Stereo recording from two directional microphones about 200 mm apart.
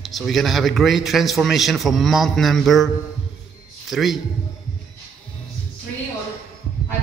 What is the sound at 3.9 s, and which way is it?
Speech, centre (ahead or behind).